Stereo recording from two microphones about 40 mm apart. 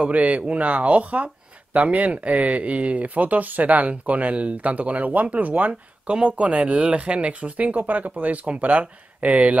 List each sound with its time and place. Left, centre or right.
0.0 s speech: right
6.0 s speech: right